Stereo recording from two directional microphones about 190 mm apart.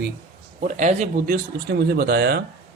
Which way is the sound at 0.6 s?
40° right (ahead or behind).